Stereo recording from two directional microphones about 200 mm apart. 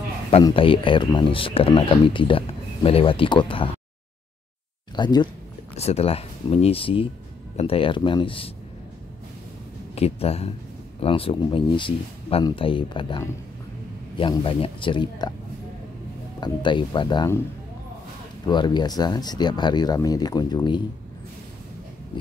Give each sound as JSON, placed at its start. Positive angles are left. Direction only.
{"t": 0.3, "sound": "speech", "side_deg": 25}
{"t": 4.9, "sound": "speech", "side_deg": 20}
{"t": 9.9, "sound": "speech", "side_deg": 30}
{"t": 16.3, "sound": "speech", "side_deg": 20}
{"t": 18.5, "sound": "speech", "side_deg": 20}